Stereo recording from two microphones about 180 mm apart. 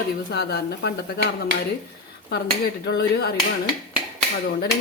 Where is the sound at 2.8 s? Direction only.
65° left (ahead or behind).